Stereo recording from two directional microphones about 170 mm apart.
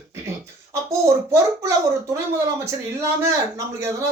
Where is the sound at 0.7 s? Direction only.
15° right (ahead or behind).